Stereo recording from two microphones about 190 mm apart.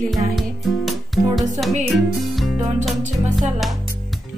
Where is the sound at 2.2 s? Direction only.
Centre (ahead or behind).